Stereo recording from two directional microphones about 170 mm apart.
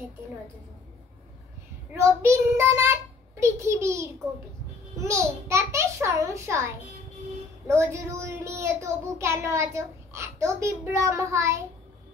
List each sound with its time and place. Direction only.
2.0 s a child's voice: 15° right (ahead or behind)